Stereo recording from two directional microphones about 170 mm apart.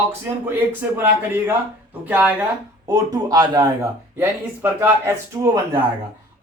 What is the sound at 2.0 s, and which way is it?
Speech, 10° right (ahead or behind).